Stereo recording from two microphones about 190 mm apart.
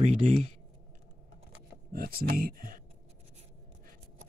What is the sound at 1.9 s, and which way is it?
Speech, 50° right (ahead or behind).